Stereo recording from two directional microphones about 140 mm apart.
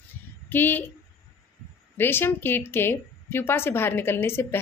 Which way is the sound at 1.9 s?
15° left (ahead or behind).